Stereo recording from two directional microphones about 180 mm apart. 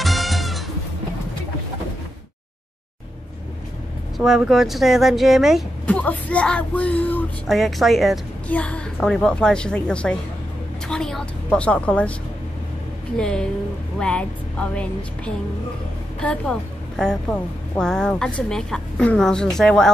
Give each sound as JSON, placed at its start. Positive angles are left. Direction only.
{"t": 0.0, "sound": "music", "side_deg": 0}
{"t": 4.2, "sound": "speech", "side_deg": 0}
{"t": 13.2, "sound": "speech", "side_deg": 5}